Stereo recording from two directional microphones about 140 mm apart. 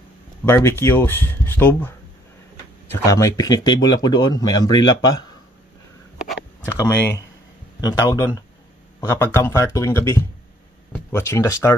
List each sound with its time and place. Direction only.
0.5 s speech: 15° left (ahead or behind)
6.8 s speech: 20° left (ahead or behind)